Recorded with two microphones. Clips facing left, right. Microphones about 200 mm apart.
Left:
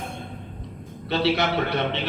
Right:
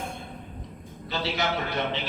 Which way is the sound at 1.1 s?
65° left (ahead or behind).